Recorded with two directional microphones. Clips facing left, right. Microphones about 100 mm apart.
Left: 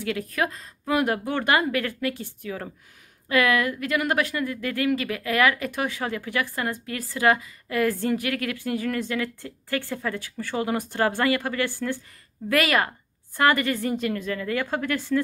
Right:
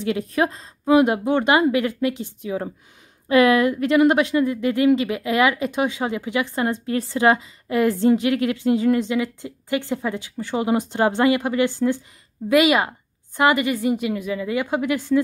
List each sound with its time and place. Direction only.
0.0 s speech: 25° right (ahead or behind)